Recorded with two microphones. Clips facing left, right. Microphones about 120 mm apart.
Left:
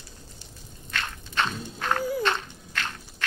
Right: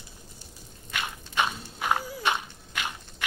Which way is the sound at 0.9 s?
10° right (ahead or behind).